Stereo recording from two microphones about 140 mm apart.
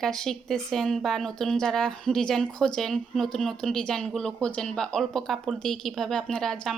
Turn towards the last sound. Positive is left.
turn(degrees=5)  # may be behind; listen again after turning